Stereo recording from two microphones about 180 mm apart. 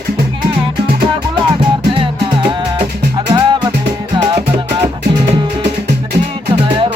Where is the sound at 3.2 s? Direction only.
15° right (ahead or behind).